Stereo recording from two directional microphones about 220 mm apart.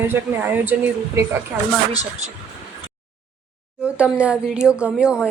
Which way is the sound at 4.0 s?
5° right (ahead or behind).